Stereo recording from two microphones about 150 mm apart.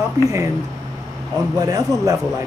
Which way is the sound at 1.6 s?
25° right (ahead or behind).